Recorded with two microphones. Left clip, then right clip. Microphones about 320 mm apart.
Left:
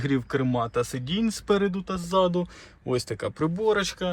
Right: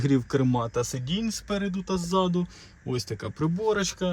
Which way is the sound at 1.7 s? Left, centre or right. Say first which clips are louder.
Left 2 dB; centre.